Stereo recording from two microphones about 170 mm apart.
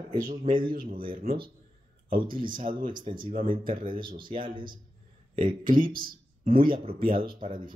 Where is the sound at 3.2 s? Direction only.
55° right (ahead or behind).